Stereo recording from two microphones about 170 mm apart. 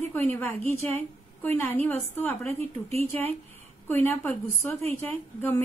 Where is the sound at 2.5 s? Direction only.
35° right (ahead or behind).